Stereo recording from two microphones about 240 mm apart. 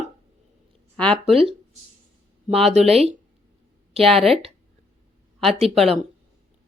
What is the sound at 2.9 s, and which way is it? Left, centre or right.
Speech, right.